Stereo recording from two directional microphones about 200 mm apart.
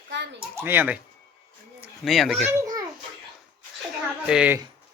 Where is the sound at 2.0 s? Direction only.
Centre (ahead or behind).